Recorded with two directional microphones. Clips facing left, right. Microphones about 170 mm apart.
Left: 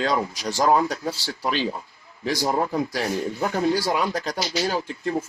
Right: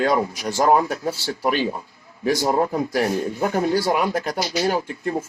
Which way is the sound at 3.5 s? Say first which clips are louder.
Right 2 dB; 50° right (ahead or behind).